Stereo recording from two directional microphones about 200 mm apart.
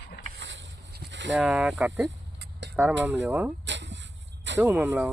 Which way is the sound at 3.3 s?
10° right (ahead or behind).